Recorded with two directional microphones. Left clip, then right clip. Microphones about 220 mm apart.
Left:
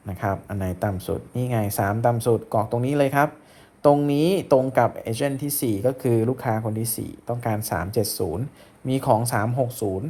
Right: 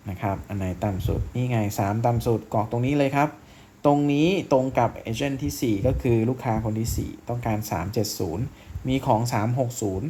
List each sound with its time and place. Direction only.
0.2 s speech: 15° left (ahead or behind)